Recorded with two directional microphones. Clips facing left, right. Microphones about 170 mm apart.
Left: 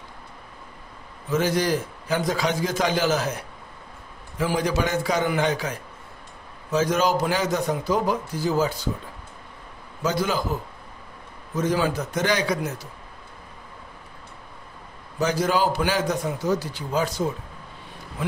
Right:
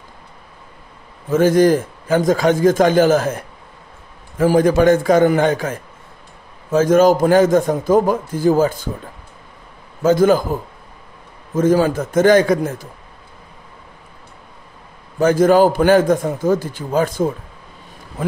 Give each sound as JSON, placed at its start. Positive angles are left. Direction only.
{"t": 1.3, "sound": "a man's voice", "side_deg": -50}
{"t": 10.0, "sound": "a man's voice", "side_deg": -50}
{"t": 15.1, "sound": "a man's voice", "side_deg": -50}